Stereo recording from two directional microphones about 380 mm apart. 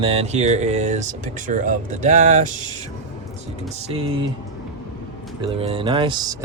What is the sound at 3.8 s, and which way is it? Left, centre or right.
Speech, centre.